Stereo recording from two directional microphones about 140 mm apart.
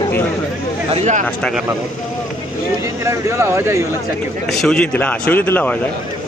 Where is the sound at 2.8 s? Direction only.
20° right (ahead or behind).